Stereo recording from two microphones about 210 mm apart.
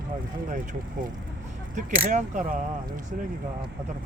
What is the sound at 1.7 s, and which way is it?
Speech, 35° right (ahead or behind).